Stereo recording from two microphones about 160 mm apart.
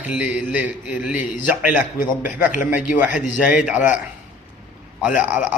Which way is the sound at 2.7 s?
10° right (ahead or behind).